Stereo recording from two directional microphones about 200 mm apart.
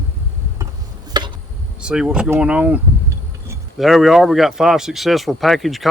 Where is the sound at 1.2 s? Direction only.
20° right (ahead or behind).